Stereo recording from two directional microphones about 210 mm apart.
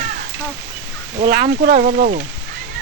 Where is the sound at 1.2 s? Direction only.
45° right (ahead or behind).